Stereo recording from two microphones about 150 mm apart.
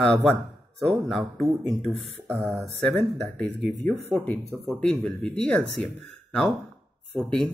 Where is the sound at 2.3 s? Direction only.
20° right (ahead or behind).